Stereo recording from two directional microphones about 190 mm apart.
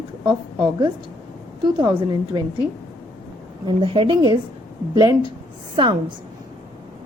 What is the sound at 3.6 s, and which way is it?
A woman's voice, 25° right (ahead or behind).